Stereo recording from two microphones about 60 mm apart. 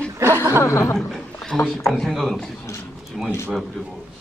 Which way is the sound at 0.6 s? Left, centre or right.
Left.